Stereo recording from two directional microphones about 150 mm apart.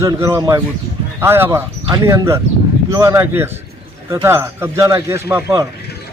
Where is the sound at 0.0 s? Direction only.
20° right (ahead or behind).